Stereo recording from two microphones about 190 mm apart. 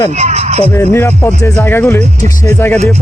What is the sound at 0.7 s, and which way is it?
Speech, 10° left (ahead or behind).